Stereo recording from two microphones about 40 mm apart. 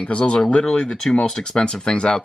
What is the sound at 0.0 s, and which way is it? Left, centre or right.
Speech, left.